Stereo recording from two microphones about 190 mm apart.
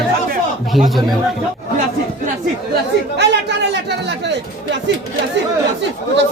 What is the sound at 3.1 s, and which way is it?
Chatter, 65° right (ahead or behind).